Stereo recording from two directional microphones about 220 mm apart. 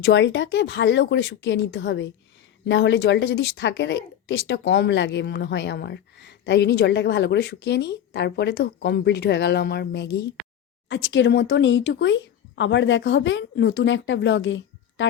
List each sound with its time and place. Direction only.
0.0 s speech: 55° left (ahead or behind)